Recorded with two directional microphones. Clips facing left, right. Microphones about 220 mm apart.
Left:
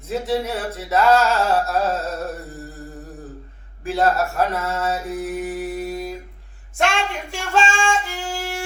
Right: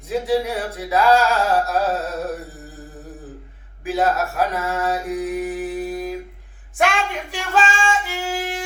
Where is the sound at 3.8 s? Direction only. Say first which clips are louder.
Left 1 dB; 5° right (ahead or behind).